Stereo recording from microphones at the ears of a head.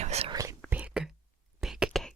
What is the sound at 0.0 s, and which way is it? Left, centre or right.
Whispering, right.